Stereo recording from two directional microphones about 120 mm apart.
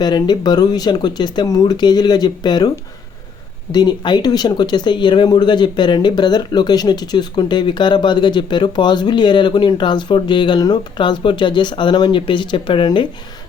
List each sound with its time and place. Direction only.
0.0 s speech: 35° left (ahead or behind)